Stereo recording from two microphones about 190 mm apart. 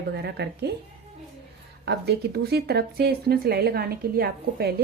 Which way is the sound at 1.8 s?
60° right (ahead or behind).